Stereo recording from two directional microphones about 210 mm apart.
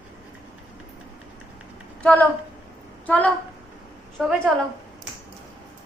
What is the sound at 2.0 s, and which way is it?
A woman's voice, 5° left (ahead or behind).